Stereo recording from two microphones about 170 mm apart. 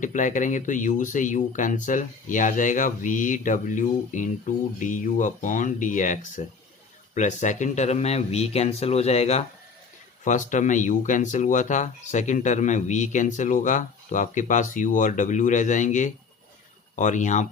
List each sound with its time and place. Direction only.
0.0 s speech: 45° left (ahead or behind)